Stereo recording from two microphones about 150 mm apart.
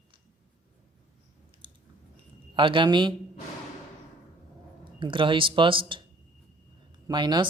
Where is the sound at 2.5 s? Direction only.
35° right (ahead or behind).